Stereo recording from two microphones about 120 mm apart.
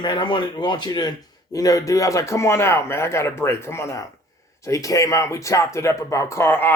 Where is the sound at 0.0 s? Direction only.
40° left (ahead or behind).